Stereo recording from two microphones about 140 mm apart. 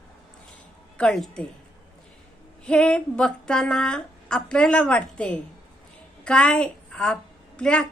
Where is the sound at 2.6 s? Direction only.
5° left (ahead or behind).